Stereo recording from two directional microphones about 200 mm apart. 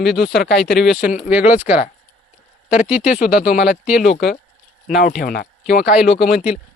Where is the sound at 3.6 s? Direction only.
5° right (ahead or behind).